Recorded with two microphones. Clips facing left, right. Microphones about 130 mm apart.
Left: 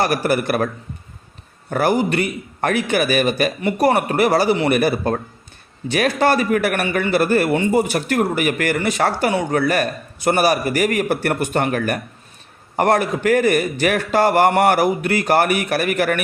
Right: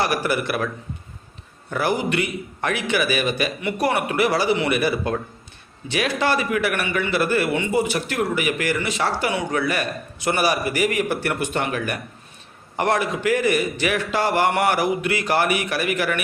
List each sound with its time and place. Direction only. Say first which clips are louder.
0.0 s a man's voice: left 4 dB; 45° left (ahead or behind)
1.7 s a man's voice: left 4 dB; 45° left (ahead or behind)